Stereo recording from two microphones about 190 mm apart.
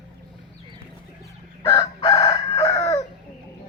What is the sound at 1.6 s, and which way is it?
Chicken, 30° left (ahead or behind).